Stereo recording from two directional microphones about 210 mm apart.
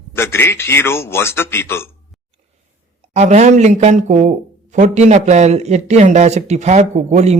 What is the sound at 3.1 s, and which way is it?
Speech, 35° right (ahead or behind).